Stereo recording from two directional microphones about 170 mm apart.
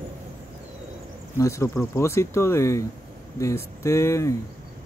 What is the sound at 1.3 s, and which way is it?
Speech, 15° left (ahead or behind).